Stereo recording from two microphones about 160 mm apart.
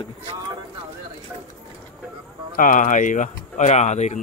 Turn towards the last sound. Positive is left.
turn(degrees=45)  # may be behind; listen again after turning